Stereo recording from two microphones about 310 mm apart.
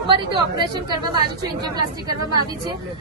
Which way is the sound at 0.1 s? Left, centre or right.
Centre.